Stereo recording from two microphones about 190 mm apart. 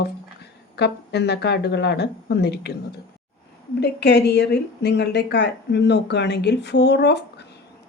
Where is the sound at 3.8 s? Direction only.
60° left (ahead or behind).